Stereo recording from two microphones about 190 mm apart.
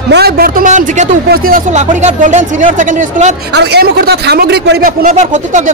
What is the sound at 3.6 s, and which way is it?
Speech, 55° right (ahead or behind).